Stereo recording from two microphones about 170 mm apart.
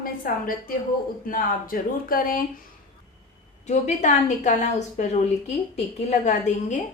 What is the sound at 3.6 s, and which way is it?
A woman's voice, 45° left (ahead or behind).